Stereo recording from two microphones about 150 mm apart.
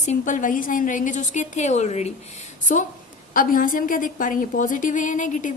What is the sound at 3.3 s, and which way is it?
A woman's voice, 65° left (ahead or behind).